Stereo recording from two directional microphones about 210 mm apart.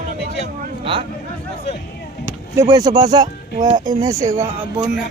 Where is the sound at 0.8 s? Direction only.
25° right (ahead or behind).